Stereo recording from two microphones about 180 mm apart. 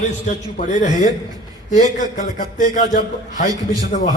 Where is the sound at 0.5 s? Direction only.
45° left (ahead or behind).